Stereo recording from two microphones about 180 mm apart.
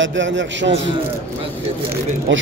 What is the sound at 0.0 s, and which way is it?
Speech, 90° right.